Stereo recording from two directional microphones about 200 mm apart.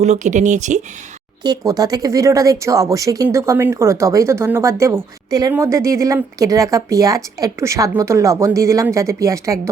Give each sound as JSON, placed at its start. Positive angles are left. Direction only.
{"t": 0.0, "sound": "speech", "side_deg": -35}
{"t": 1.5, "sound": "speech", "side_deg": -20}